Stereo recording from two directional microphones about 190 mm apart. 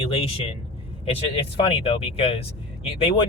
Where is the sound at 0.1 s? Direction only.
30° left (ahead or behind).